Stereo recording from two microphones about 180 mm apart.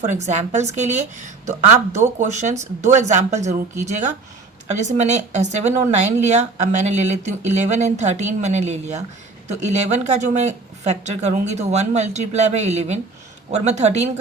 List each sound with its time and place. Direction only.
0.0 s speech: 40° right (ahead or behind)